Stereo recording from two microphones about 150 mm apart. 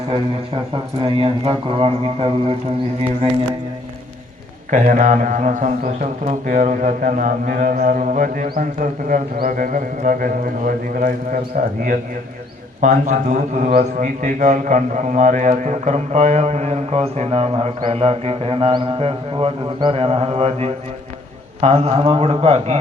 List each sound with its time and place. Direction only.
1.0 s speech: 35° right (ahead or behind)
4.7 s speech: 55° right (ahead or behind)
12.8 s a man's voice: 55° right (ahead or behind)